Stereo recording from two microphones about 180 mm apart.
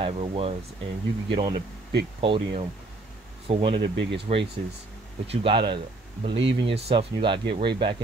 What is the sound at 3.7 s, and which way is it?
Speech, 70° right (ahead or behind).